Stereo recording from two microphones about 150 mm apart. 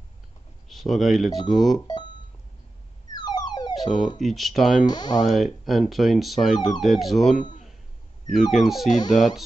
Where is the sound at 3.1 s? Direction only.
25° left (ahead or behind).